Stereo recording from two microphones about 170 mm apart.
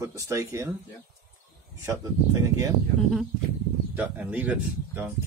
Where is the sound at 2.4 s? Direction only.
20° right (ahead or behind).